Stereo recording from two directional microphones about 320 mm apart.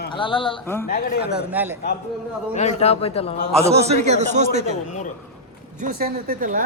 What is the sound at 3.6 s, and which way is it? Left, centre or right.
A man's voice, centre.